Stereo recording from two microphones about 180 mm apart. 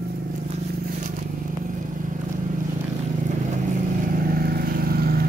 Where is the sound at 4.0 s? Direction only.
50° right (ahead or behind).